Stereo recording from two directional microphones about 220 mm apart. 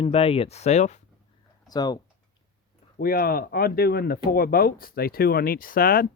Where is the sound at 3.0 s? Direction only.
40° left (ahead or behind).